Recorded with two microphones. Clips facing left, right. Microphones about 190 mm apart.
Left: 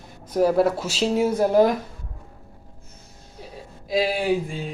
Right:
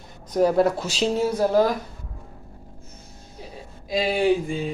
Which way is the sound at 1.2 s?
15° left (ahead or behind).